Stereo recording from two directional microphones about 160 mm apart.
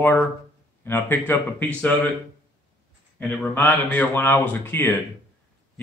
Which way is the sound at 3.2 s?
5° left (ahead or behind).